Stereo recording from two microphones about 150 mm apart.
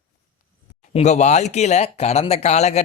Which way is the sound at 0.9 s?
50° left (ahead or behind).